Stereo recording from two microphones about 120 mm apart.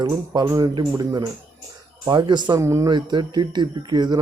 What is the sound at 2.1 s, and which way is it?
Speech, 40° right (ahead or behind).